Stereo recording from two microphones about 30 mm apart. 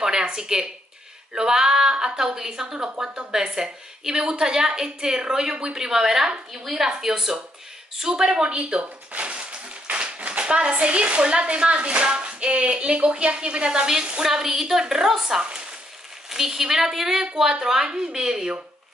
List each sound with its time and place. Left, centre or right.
0.2 s a woman's voice: right
8.0 s a woman's voice: right
9.2 s a sound: right
10.4 s a woman's voice: right
14.4 s a woman's voice: centre